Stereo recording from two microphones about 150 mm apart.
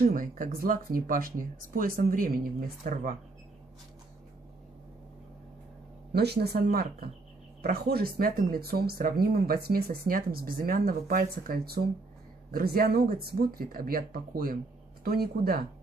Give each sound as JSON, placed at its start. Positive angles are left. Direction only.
{"t": 0.0, "sound": "speech", "side_deg": -65}
{"t": 6.1, "sound": "speech", "side_deg": -90}
{"t": 15.0, "sound": "speech", "side_deg": -90}